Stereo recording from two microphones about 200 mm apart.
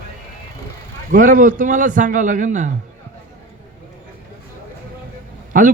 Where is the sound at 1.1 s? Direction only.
40° right (ahead or behind).